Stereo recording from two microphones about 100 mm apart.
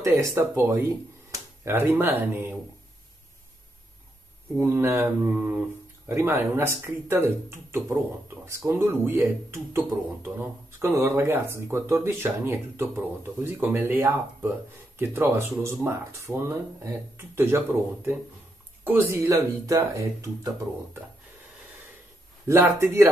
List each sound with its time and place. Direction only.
0.0 s speech: 30° right (ahead or behind)
4.6 s speech: 25° right (ahead or behind)
18.9 s speech: 25° right (ahead or behind)
22.5 s speech: 25° right (ahead or behind)